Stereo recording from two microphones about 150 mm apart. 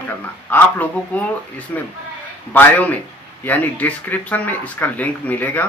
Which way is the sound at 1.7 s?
10° left (ahead or behind).